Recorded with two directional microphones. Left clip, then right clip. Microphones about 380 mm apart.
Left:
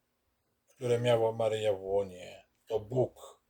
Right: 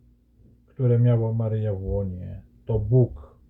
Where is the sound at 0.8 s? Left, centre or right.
Centre.